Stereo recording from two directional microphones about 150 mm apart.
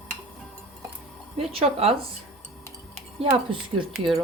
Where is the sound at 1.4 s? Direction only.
40° right (ahead or behind).